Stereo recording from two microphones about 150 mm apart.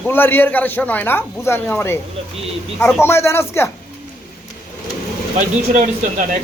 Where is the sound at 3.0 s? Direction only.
15° left (ahead or behind).